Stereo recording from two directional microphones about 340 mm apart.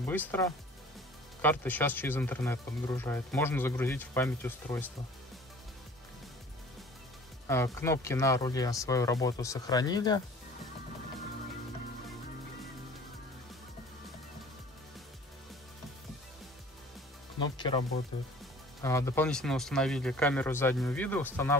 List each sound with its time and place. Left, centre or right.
0.0 s speech: centre
7.4 s speech: centre
17.4 s speech: centre